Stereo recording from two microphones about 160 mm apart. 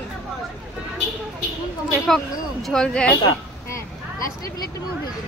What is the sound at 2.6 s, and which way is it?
Speech, 5° left (ahead or behind).